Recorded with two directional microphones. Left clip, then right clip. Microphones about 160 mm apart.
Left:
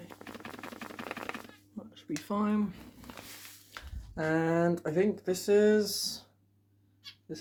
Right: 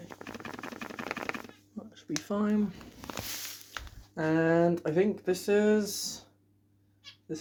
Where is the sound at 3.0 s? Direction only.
90° right.